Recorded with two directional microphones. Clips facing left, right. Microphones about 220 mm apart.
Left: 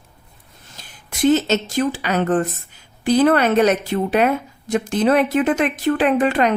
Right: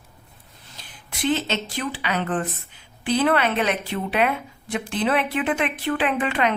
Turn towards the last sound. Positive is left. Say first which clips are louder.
# left 6 dB
turn(degrees=40)  # may be behind; listen again after turning